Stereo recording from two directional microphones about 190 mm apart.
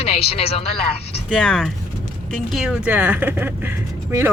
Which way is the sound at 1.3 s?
5° left (ahead or behind).